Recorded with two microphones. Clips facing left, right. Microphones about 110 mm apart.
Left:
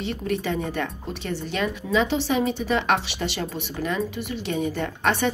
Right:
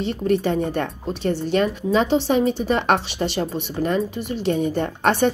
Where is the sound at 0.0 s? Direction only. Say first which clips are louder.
Right 6 dB; 40° right (ahead or behind).